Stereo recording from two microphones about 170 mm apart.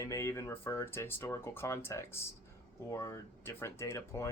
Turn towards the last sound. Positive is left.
turn(degrees=15)  # may be behind; listen again after turning